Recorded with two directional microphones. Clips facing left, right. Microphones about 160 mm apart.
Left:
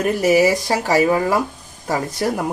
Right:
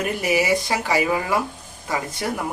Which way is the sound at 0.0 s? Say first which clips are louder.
Left 7 dB; 40° left (ahead or behind).